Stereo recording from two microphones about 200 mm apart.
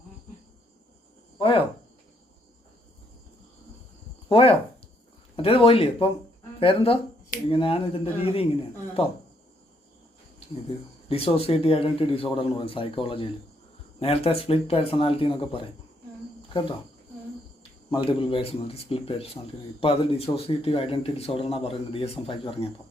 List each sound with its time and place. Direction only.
1.4 s cricket: 25° left (ahead or behind)
4.3 s a man's voice: 25° left (ahead or behind)
11.1 s a man's voice: 30° left (ahead or behind)